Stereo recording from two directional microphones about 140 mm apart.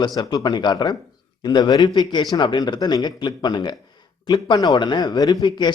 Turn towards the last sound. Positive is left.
turn(degrees=30)  # may be behind; listen again after turning